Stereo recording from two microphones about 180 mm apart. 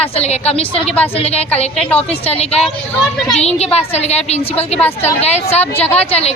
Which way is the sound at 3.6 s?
35° left (ahead or behind).